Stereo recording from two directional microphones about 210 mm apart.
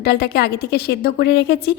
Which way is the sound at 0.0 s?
50° left (ahead or behind).